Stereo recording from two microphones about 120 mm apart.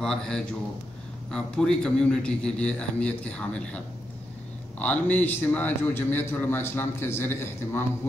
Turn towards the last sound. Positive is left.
turn(degrees=20)  # may be behind; listen again after turning